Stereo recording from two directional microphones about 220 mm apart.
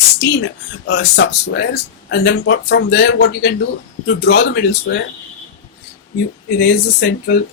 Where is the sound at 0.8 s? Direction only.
55° left (ahead or behind).